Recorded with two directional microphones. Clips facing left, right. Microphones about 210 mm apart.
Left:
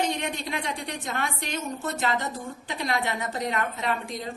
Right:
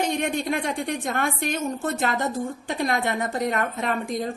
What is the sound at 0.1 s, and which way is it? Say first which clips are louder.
A woman's voice: right 6 dB; 50° right (ahead or behind).